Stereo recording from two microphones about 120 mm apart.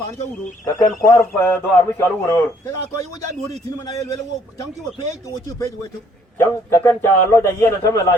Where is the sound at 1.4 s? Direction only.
15° left (ahead or behind).